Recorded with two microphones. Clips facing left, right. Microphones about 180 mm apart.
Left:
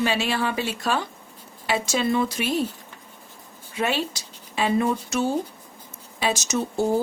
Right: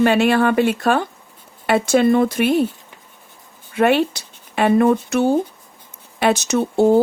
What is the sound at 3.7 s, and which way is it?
Speech, 60° right (ahead or behind).